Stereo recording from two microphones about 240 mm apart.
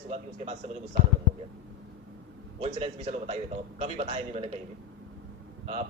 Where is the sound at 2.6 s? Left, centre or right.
Right.